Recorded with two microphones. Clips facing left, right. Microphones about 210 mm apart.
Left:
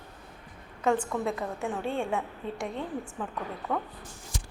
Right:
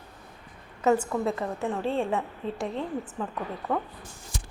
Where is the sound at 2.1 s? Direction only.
Centre (ahead or behind).